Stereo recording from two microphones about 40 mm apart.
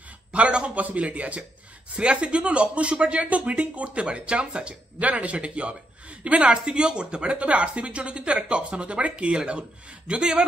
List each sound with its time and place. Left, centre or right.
0.3 s a man's voice: right